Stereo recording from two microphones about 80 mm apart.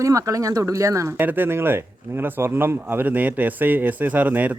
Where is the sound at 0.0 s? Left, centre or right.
Right.